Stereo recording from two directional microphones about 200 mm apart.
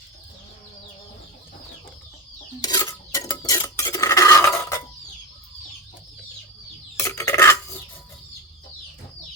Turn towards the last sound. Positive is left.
turn(degrees=15)  # may be behind; listen again after turning